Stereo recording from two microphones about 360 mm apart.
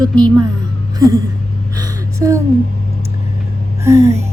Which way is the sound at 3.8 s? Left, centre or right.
Centre.